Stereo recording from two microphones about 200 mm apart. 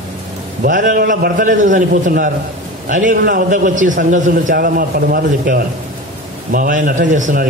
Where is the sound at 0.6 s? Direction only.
45° right (ahead or behind).